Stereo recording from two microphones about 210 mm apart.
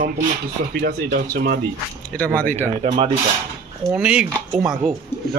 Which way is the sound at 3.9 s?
5° right (ahead or behind).